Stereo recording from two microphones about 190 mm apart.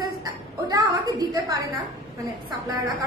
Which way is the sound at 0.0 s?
20° right (ahead or behind).